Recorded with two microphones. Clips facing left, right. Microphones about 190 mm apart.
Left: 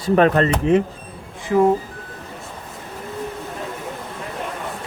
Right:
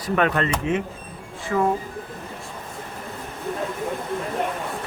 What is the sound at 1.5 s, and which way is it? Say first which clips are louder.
Speech: left 6 dB; 20° left (ahead or behind).